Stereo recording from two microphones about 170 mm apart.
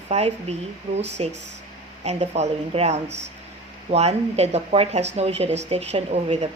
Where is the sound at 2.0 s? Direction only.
40° right (ahead or behind).